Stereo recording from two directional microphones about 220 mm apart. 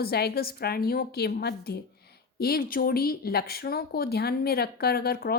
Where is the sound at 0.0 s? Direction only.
45° left (ahead or behind).